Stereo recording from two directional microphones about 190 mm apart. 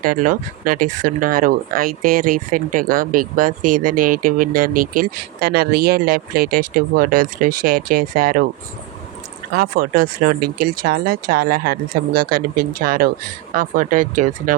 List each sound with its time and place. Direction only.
0.0 s speech: 45° right (ahead or behind)
9.6 s speech: 50° right (ahead or behind)